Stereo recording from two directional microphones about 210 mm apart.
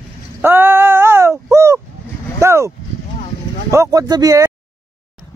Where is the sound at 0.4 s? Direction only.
10° right (ahead or behind).